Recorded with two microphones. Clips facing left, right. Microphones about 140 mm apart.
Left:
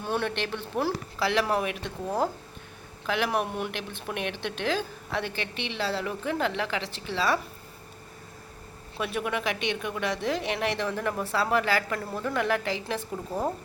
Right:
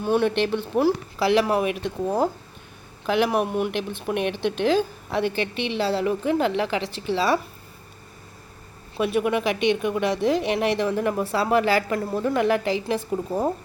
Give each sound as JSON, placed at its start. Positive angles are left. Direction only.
{"t": 0.0, "sound": "speech", "side_deg": -10}
{"t": 9.0, "sound": "speech", "side_deg": -15}